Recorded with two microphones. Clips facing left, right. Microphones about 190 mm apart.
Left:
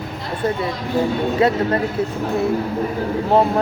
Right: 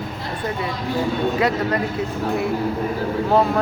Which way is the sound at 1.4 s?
30° left (ahead or behind).